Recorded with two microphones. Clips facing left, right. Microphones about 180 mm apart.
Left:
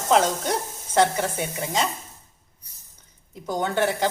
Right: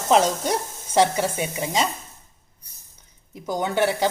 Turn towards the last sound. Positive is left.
turn(degrees=-10)  # may be behind; listen again after turning